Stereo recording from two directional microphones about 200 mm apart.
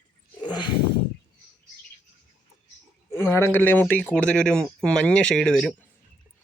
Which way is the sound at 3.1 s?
10° left (ahead or behind).